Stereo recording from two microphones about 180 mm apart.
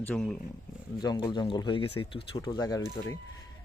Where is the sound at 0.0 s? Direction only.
5° left (ahead or behind).